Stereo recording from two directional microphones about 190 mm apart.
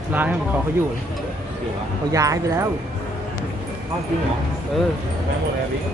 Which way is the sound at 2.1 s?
15° right (ahead or behind).